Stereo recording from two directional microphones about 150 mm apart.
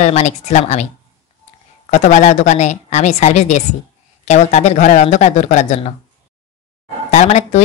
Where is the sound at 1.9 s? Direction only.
55° left (ahead or behind).